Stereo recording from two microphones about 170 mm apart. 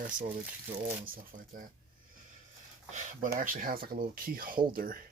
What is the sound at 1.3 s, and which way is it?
Speech, 50° right (ahead or behind).